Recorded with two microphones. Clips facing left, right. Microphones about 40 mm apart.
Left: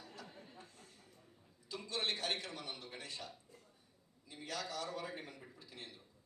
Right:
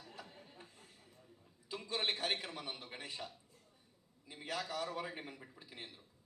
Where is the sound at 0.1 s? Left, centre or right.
Centre.